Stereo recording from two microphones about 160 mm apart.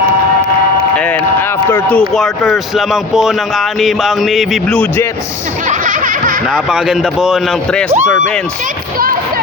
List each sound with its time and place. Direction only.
0.9 s speech: 10° left (ahead or behind)
5.6 s a sound: 55° right (ahead or behind)
6.5 s speech: 5° right (ahead or behind)